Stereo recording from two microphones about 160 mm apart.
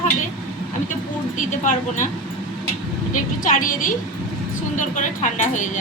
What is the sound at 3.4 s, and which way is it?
A woman's voice, 55° left (ahead or behind).